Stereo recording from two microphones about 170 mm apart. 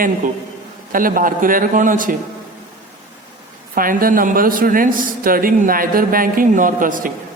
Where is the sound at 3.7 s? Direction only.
55° right (ahead or behind).